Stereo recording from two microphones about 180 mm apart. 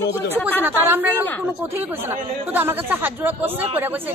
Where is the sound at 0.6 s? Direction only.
10° right (ahead or behind).